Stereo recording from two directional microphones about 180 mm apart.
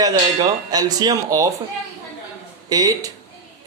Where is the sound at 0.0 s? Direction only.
20° right (ahead or behind).